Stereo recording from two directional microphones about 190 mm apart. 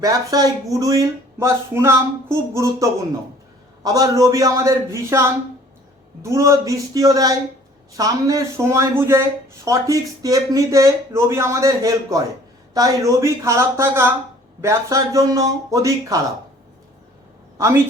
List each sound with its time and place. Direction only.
0.0 s speech: 20° right (ahead or behind)
3.8 s speech: 20° right (ahead or behind)
17.6 s speech: 15° right (ahead or behind)